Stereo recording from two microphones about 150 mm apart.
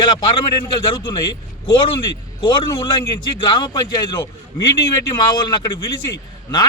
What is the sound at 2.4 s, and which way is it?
A man's voice, 30° left (ahead or behind).